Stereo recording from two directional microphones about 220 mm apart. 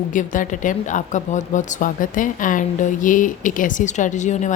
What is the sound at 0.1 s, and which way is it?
Speech, 35° left (ahead or behind).